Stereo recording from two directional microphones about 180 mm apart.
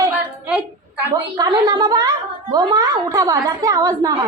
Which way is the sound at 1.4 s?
25° right (ahead or behind).